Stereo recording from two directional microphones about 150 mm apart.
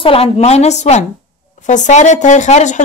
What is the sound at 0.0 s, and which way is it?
A woman's voice, 40° left (ahead or behind).